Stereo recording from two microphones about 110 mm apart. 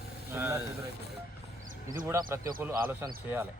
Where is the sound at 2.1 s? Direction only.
30° right (ahead or behind).